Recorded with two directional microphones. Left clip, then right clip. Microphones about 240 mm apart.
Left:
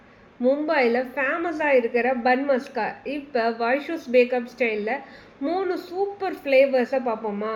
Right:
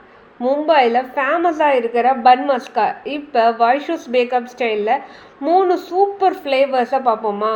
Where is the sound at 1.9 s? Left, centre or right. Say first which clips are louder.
Right 9 dB; right.